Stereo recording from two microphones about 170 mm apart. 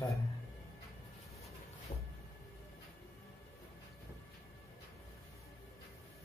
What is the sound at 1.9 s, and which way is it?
Music, 40° left (ahead or behind).